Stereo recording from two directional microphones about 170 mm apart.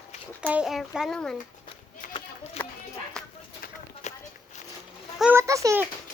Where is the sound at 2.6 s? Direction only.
40° left (ahead or behind).